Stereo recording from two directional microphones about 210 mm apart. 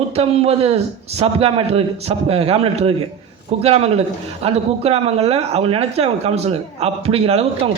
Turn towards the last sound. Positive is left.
turn(degrees=-25)  # may be behind; listen again after turning